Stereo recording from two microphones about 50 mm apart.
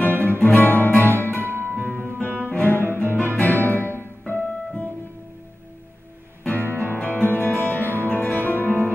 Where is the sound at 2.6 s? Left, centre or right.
Left.